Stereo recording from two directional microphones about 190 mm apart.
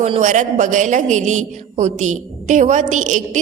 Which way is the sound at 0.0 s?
40° right (ahead or behind).